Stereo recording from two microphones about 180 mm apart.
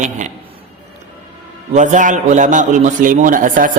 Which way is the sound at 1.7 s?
40° right (ahead or behind).